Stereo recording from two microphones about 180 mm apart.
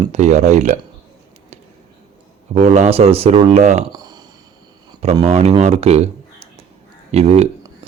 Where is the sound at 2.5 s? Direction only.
35° right (ahead or behind).